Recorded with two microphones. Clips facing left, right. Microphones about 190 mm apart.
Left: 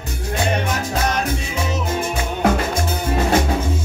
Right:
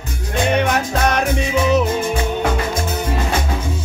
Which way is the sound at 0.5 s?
65° right (ahead or behind).